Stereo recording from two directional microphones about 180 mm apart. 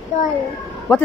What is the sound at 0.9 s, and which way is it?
Speech, 15° left (ahead or behind).